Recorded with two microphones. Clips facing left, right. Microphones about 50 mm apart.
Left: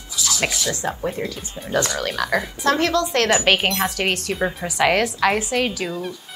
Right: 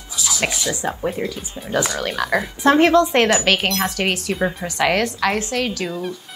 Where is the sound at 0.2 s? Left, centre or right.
Centre.